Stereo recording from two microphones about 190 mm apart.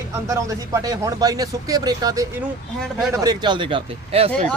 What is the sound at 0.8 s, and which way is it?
Speech, 20° right (ahead or behind).